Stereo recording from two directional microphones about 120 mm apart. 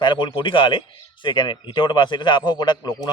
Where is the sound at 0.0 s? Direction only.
40° left (ahead or behind).